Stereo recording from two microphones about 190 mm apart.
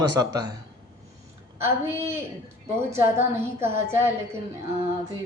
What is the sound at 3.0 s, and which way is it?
Speech, 15° right (ahead or behind).